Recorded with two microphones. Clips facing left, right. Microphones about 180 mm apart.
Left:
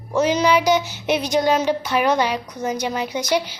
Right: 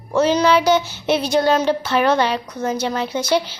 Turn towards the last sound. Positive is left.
turn(degrees=15)  # may be behind; listen again after turning